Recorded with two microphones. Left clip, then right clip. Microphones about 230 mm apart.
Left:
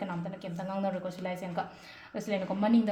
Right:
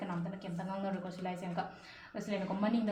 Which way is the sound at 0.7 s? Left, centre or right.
Left.